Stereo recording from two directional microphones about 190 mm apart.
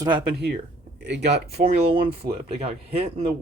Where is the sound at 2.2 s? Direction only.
30° right (ahead or behind).